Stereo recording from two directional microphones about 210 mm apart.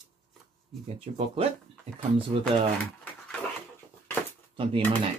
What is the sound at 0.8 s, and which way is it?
Speech, 25° right (ahead or behind).